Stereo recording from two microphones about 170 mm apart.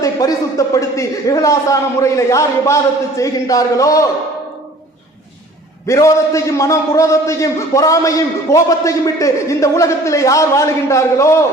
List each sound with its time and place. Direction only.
0.0 s a man's voice: 20° left (ahead or behind)
5.9 s a man's voice: 20° left (ahead or behind)